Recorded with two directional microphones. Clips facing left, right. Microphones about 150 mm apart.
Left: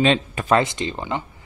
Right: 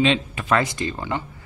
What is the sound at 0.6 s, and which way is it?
Speech, 25° left (ahead or behind).